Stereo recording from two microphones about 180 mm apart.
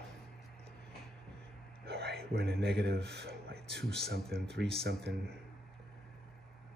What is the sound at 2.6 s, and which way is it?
A man's voice, 65° right (ahead or behind).